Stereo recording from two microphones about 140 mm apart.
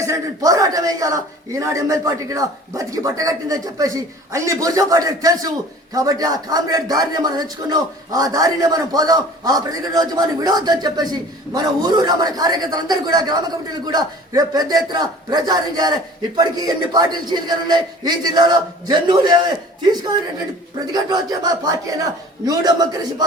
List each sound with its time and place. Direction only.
0.0 s a man's voice: 25° right (ahead or behind)